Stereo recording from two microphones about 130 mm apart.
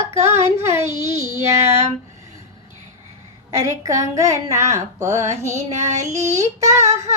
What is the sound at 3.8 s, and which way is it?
Speech, 25° right (ahead or behind).